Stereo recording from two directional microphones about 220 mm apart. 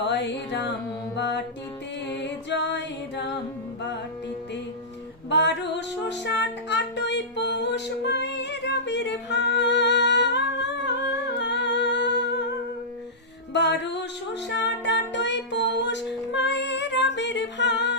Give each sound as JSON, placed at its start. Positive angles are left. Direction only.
{"t": 0.0, "sound": "music", "side_deg": 50}
{"t": 5.3, "sound": "music", "side_deg": 50}